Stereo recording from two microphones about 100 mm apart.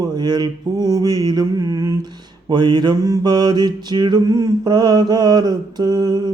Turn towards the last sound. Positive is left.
turn(degrees=-45)  # may be behind; listen again after turning